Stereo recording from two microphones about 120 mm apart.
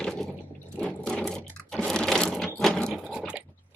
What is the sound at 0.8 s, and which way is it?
Sewing machine, 5° left (ahead or behind).